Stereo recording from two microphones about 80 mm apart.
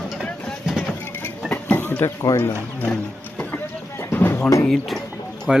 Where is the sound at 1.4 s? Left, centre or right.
Left.